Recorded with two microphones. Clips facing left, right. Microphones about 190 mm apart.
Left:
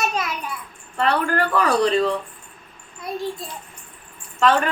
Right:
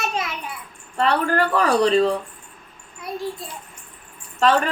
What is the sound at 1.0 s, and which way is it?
Speech, 35° right (ahead or behind).